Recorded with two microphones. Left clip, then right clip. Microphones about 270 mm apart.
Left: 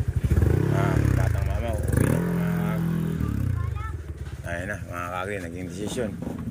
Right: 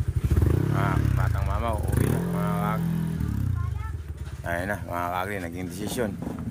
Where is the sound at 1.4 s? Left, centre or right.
Centre.